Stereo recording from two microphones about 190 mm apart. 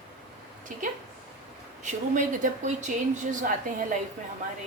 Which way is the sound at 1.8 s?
40° right (ahead or behind).